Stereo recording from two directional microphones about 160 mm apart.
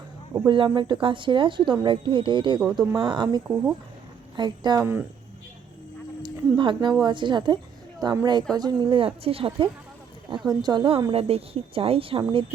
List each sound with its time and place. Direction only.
0.3 s a woman's voice: 25° right (ahead or behind)
4.8 s speech: 10° right (ahead or behind)
6.2 s a sound: 30° right (ahead or behind)
7.0 s a woman's voice: 30° right (ahead or behind)